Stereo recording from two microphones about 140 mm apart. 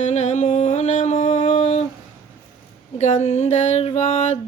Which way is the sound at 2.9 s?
55° left (ahead or behind).